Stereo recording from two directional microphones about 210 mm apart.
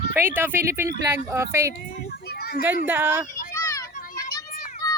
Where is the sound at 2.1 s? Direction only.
45° left (ahead or behind).